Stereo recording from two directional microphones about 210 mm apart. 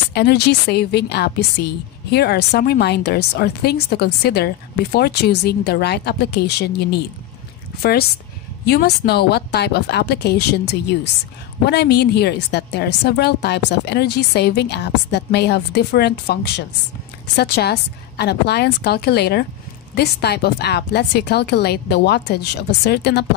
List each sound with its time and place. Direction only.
0.1 s a woman's voice: 50° left (ahead or behind)
8.6 s a woman's voice: 50° left (ahead or behind)
11.6 s a woman's voice: 50° left (ahead or behind)